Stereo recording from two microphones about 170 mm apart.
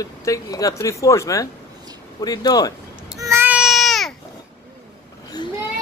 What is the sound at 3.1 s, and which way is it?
Baby cry, 15° right (ahead or behind).